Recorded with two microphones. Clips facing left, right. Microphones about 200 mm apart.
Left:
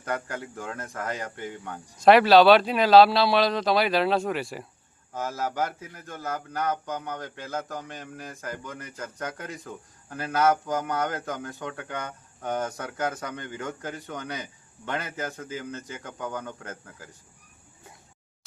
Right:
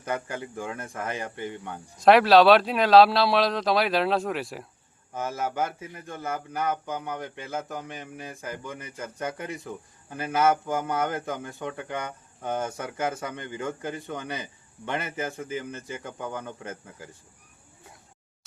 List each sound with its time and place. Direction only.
0.1 s a man's voice: centre (ahead or behind)